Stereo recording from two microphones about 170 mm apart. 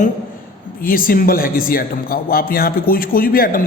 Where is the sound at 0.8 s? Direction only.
55° left (ahead or behind).